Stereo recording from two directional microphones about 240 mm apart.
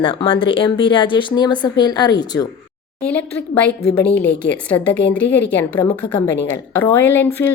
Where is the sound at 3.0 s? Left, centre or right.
Centre.